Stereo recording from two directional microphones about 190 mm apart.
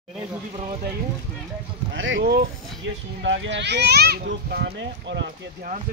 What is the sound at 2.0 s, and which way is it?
A child's voice, 75° right (ahead or behind).